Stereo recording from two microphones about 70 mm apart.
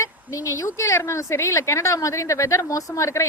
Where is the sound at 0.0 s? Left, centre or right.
Left.